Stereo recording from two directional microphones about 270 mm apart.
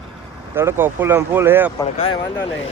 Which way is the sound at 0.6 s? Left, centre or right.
Centre.